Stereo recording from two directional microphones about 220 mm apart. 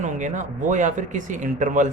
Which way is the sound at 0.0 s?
35° right (ahead or behind).